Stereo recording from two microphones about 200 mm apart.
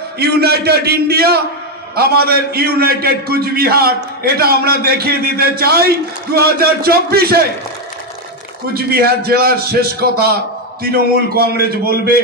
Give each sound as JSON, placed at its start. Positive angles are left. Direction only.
{"t": 0.2, "sound": "a man's voice", "side_deg": -55}
{"t": 8.7, "sound": "a man's voice", "side_deg": -50}